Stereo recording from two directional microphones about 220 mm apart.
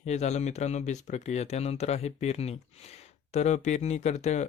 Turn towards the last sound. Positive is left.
turn(degrees=30)  # may be behind; listen again after turning